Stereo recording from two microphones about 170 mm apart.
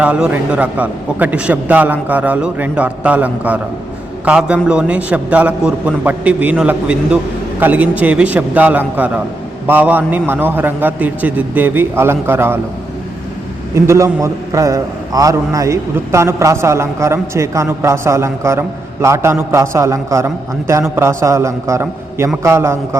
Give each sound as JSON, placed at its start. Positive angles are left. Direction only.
{"t": 0.0, "sound": "a man's voice", "side_deg": -10}
{"t": 13.7, "sound": "a man's voice", "side_deg": -15}